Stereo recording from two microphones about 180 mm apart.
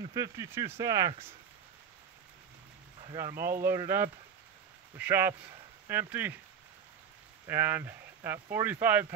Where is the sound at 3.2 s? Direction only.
15° right (ahead or behind).